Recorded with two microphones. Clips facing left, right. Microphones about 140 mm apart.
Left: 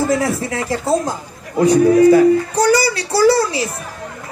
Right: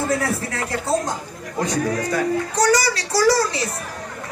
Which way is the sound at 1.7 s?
30° left (ahead or behind).